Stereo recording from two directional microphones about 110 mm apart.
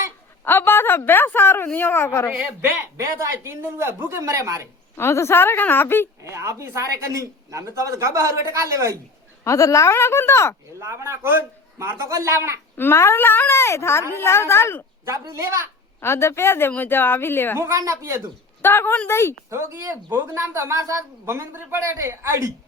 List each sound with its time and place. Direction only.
0.4 s speech: 20° left (ahead or behind)
2.4 s speech: 15° right (ahead or behind)
4.9 s speech: 25° left (ahead or behind)
6.2 s speech: 25° right (ahead or behind)
9.4 s speech: 30° left (ahead or behind)
10.8 s speech: 25° right (ahead or behind)
12.7 s speech: 20° left (ahead or behind)
16.0 s speech: 25° left (ahead or behind)
17.6 s speech: 25° right (ahead or behind)
18.6 s speech: 20° left (ahead or behind)
19.5 s speech: 25° right (ahead or behind)